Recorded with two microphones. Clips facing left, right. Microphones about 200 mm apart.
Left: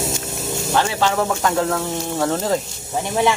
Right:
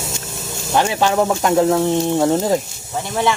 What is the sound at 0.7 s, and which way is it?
Speech, 15° right (ahead or behind).